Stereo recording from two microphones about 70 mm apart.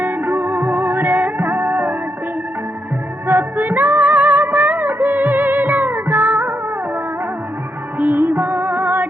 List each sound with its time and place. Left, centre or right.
0.0 s music: right
1.4 s music: right
3.2 s music: right
7.9 s music: right